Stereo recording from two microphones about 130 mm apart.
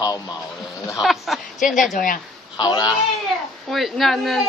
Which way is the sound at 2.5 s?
35° left (ahead or behind).